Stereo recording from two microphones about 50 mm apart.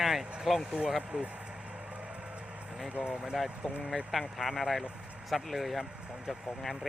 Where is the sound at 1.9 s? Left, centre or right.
Right.